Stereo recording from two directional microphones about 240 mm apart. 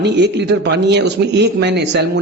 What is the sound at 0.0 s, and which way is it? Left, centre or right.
A man's voice, right.